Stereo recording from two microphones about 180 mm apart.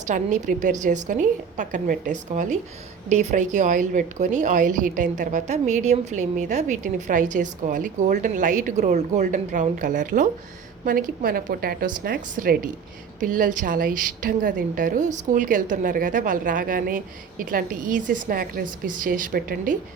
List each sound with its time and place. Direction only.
0.1 s a woman's voice: 45° right (ahead or behind)